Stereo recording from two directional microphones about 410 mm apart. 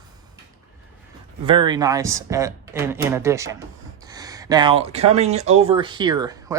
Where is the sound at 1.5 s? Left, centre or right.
Centre.